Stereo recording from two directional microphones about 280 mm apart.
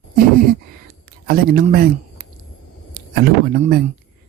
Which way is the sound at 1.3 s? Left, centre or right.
Right.